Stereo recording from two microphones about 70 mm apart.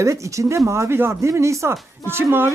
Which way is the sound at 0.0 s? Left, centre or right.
Right.